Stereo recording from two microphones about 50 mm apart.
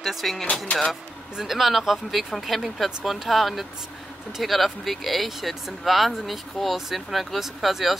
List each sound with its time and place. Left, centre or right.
0.0 s speech: centre